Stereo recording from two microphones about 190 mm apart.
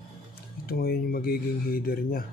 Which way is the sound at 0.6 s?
50° left (ahead or behind).